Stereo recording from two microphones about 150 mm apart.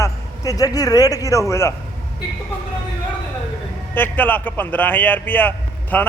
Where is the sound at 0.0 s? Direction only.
25° left (ahead or behind).